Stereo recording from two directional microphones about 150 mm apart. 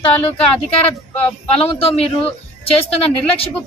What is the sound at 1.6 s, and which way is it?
Speech, 40° left (ahead or behind).